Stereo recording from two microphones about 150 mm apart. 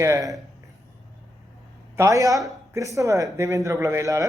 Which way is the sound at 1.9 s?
20° right (ahead or behind).